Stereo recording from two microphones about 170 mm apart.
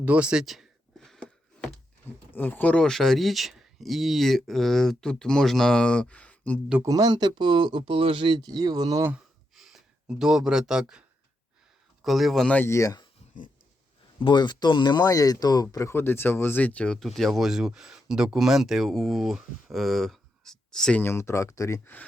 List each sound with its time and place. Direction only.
0.0 s speech: 5° right (ahead or behind)
6.8 s speech: 20° right (ahead or behind)
9.1 s a sound: centre (ahead or behind)
12.0 s speech: centre (ahead or behind); by 13.1 s 20° left (ahead or behind)
14.3 s speech: 25° left (ahead or behind)